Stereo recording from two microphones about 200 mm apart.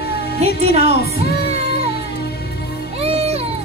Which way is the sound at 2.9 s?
30° right (ahead or behind).